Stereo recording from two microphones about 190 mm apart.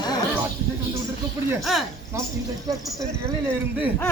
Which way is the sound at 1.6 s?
Centre (ahead or behind).